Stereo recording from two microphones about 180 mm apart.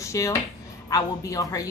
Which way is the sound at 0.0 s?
15° left (ahead or behind).